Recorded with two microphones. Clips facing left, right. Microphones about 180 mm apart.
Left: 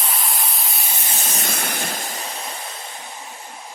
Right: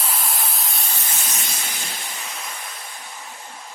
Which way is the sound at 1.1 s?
35° left (ahead or behind).